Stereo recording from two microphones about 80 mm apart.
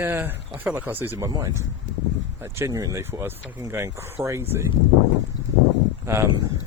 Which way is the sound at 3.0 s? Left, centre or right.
Right.